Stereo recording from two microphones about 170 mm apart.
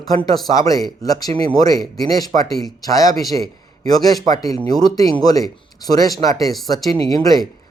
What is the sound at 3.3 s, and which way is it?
Speech, 40° right (ahead or behind).